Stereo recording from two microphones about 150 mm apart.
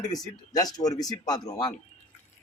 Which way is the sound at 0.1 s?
25° left (ahead or behind).